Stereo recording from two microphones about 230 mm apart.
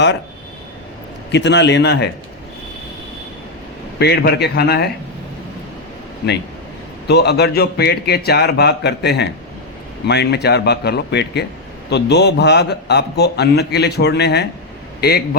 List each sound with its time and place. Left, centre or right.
1.3 s a man's voice: left
3.9 s a man's voice: left
6.2 s a man's voice: left